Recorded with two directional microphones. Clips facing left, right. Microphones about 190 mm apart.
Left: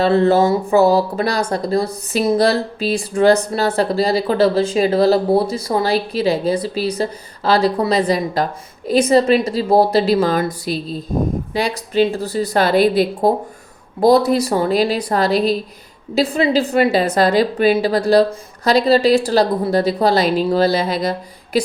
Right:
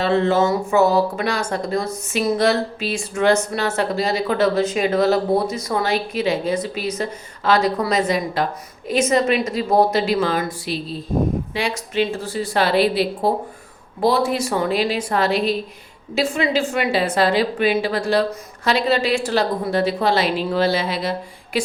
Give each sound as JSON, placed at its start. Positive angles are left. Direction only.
{"t": 0.0, "sound": "speech", "side_deg": 35}